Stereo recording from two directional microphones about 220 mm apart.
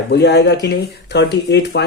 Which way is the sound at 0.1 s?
50° left (ahead or behind).